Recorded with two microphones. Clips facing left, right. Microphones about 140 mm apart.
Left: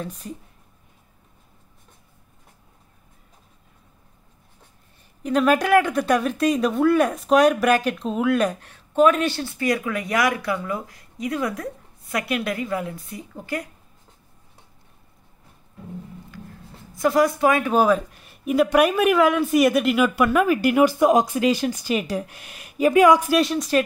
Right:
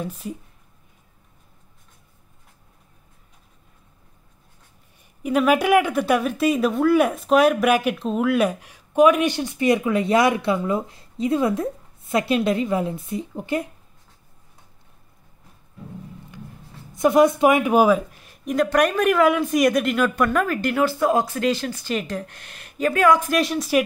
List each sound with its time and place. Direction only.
0.0 s speech: 10° right (ahead or behind)
5.2 s speech: 10° right (ahead or behind)
16.9 s speech: 20° right (ahead or behind); by 23.3 s 15° left (ahead or behind)
23.3 s speech: centre (ahead or behind)